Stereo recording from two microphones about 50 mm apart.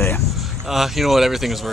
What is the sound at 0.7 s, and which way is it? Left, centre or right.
Speech, centre.